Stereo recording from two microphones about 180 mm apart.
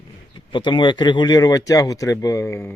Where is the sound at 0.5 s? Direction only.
25° left (ahead or behind).